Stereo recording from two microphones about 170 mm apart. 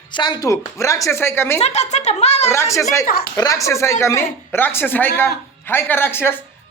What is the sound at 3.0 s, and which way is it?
Speech, 60° left (ahead or behind).